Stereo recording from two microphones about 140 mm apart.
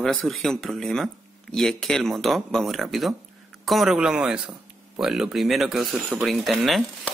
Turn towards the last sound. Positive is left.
turn(degrees=0)  # may be behind; listen again after turning